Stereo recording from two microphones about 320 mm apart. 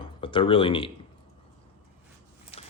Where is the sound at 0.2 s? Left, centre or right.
Centre.